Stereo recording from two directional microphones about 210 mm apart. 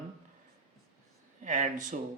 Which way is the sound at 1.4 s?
35° right (ahead or behind).